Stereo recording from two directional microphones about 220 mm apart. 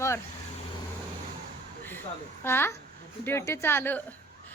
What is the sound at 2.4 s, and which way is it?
A woman's voice, 10° left (ahead or behind).